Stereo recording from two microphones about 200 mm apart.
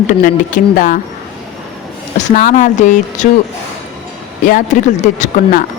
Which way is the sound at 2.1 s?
40° left (ahead or behind).